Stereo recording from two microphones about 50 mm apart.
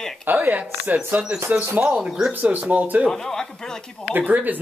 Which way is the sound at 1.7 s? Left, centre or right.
Right.